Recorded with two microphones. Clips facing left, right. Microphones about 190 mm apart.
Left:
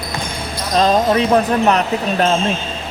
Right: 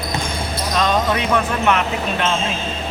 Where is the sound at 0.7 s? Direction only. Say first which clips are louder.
Left 5 dB; 35° left (ahead or behind).